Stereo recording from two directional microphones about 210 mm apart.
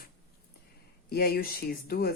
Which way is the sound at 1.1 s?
45° left (ahead or behind).